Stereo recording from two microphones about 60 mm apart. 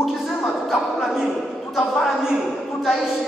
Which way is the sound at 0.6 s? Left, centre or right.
Centre.